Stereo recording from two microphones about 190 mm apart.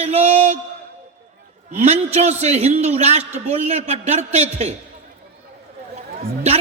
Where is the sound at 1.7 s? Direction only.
35° right (ahead or behind).